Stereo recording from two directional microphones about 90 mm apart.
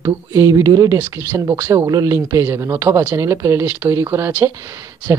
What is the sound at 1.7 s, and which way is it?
Speech, 40° right (ahead or behind).